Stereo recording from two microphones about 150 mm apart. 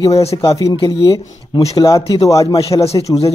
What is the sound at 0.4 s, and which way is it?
Speech, 20° left (ahead or behind).